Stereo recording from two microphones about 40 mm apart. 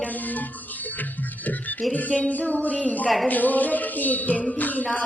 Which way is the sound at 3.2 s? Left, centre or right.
Left.